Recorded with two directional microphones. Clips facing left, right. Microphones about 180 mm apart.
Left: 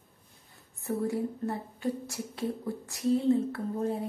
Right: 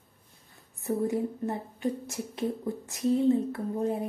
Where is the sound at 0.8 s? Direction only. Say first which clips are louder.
Right 2 dB; 20° right (ahead or behind).